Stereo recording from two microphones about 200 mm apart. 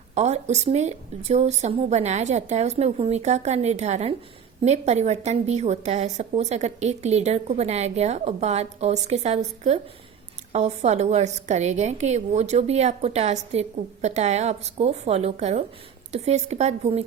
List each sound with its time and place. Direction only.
0.1 s a woman's voice: 35° right (ahead or behind)